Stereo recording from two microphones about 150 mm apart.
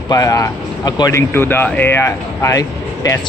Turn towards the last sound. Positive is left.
turn(degrees=20)  # may be behind; listen again after turning